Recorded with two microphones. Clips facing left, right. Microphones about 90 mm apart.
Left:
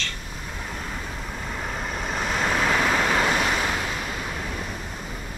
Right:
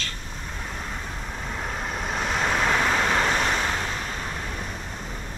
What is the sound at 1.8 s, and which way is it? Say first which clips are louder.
Waves: even; centre (ahead or behind).